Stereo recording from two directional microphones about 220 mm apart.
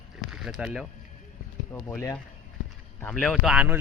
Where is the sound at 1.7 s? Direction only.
10° left (ahead or behind).